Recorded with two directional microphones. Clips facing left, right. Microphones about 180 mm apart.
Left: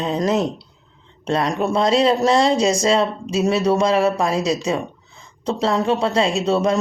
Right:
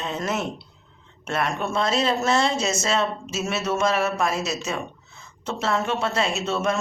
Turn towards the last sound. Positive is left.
turn(degrees=35)  # may be behind; listen again after turning